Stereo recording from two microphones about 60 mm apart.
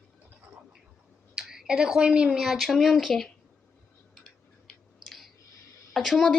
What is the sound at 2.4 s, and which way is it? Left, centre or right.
Speech, centre.